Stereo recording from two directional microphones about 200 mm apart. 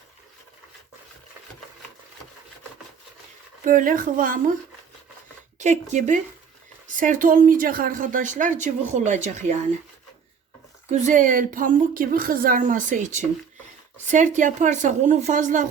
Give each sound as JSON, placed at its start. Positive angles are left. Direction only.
{"t": 3.6, "sound": "speech", "side_deg": -40}
{"t": 5.5, "sound": "a woman's voice", "side_deg": -35}
{"t": 10.9, "sound": "a woman's voice", "side_deg": -40}